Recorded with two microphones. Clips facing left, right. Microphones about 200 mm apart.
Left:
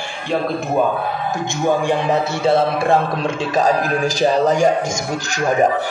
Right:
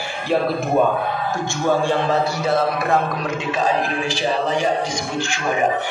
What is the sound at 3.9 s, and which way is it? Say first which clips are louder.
A man's voice: left 5 dB; 40° left (ahead or behind).